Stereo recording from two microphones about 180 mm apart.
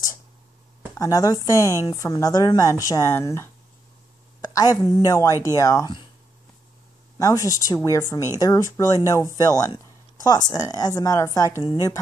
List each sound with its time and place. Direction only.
0.9 s a woman's voice: 20° left (ahead or behind)
7.2 s a woman's voice: 20° left (ahead or behind)